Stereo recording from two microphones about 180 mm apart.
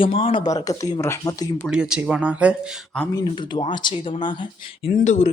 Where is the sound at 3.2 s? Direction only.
25° left (ahead or behind).